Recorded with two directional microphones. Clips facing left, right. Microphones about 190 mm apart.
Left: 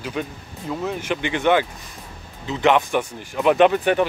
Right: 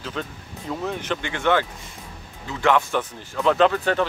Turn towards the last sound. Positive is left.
turn(degrees=20)  # may be behind; listen again after turning